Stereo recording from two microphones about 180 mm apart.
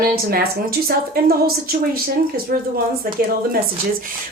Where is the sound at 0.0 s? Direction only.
55° right (ahead or behind).